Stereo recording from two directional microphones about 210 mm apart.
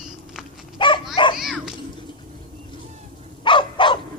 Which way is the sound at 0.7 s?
20° left (ahead or behind).